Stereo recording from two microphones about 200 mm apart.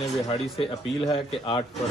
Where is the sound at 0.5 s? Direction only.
25° left (ahead or behind).